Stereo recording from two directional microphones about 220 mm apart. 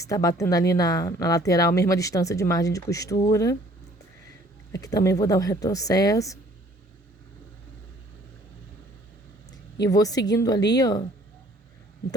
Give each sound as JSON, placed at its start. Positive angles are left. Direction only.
{"t": 0.0, "sound": "speech", "side_deg": 15}
{"t": 4.7, "sound": "speech", "side_deg": 15}
{"t": 9.8, "sound": "speech", "side_deg": 15}